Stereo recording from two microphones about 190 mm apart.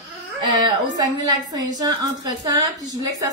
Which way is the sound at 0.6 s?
20° right (ahead or behind).